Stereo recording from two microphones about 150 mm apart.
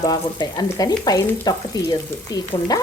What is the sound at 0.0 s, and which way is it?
Frying, 30° left (ahead or behind).